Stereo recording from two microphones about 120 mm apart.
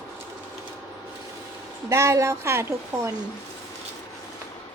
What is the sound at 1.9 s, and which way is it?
A woman's voice, 25° right (ahead or behind).